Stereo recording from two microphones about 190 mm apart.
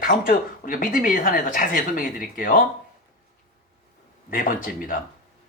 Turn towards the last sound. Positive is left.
turn(degrees=45)  # may be behind; listen again after turning